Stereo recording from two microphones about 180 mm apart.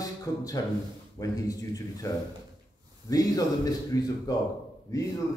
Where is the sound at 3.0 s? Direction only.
20° left (ahead or behind).